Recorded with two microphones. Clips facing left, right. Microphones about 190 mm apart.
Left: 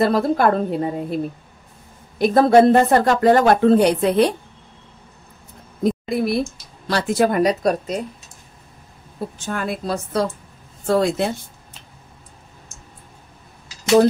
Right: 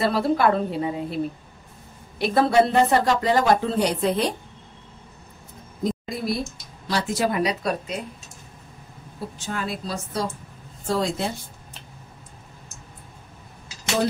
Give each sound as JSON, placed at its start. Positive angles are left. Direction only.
{"t": 0.0, "sound": "speech", "side_deg": 45}
{"t": 5.9, "sound": "a woman's voice", "side_deg": 60}
{"t": 9.5, "sound": "a woman's voice", "side_deg": 55}